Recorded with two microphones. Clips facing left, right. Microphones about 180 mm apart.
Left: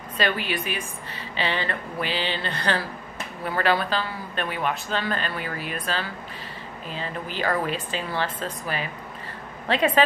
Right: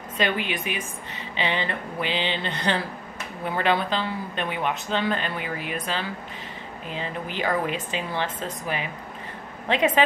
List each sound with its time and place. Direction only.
0.2 s a woman's voice: 20° right (ahead or behind)